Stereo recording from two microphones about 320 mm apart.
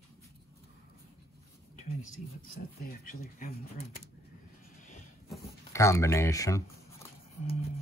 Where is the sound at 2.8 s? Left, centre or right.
Left.